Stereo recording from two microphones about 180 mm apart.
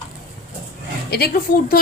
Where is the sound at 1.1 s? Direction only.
55° left (ahead or behind).